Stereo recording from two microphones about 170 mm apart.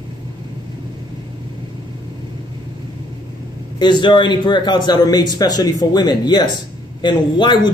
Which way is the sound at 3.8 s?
25° left (ahead or behind).